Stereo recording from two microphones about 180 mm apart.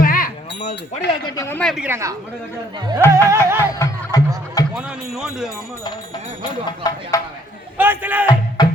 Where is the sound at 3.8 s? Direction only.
20° left (ahead or behind).